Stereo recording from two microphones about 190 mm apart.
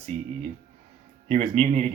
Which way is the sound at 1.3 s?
35° right (ahead or behind).